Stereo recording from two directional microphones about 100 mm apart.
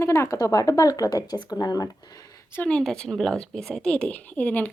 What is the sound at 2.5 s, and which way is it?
Speech, 15° left (ahead or behind).